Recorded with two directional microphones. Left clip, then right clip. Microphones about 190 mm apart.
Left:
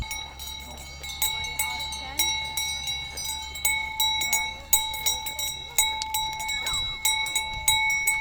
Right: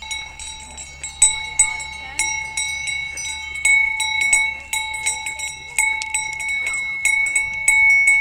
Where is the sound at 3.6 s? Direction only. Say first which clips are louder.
Right 10 dB; 55° left (ahead or behind).